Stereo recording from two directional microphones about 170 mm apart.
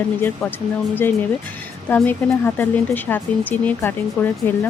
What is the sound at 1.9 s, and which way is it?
Speech, 10° left (ahead or behind).